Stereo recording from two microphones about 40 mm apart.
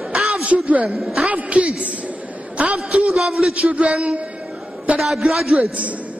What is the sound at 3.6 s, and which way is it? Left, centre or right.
Speech, right.